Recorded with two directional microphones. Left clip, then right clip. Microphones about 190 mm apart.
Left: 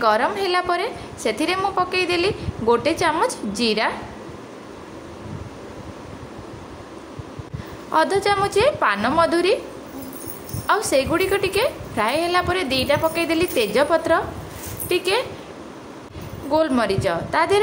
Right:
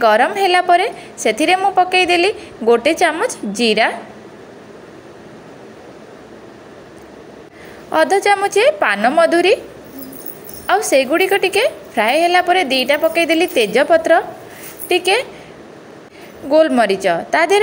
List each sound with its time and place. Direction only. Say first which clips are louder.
0.0 s a woman's voice: right 6 dB; 15° right (ahead or behind)
7.9 s a woman's voice: right 5 dB; 15° right (ahead or behind)
10.7 s a woman's voice: right 5 dB; 15° right (ahead or behind)
16.4 s speech: right 7 dB; 20° right (ahead or behind)